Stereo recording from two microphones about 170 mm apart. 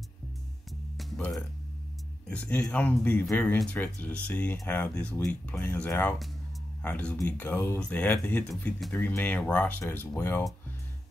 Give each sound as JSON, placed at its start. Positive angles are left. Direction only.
{"t": 0.7, "sound": "music", "side_deg": 0}
{"t": 2.2, "sound": "speech", "side_deg": 10}